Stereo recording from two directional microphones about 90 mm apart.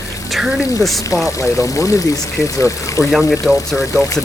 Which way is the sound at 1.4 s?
35° left (ahead or behind).